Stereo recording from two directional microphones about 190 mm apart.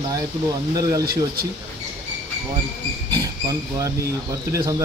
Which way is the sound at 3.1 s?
20° right (ahead or behind).